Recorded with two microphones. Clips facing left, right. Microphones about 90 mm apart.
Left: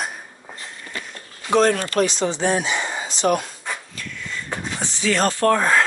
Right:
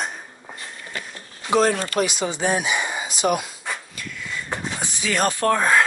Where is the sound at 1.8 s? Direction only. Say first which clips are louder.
Left 2 dB; 15° right (ahead or behind).